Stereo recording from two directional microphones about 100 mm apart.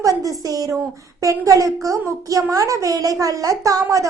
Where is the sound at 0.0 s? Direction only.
35° right (ahead or behind).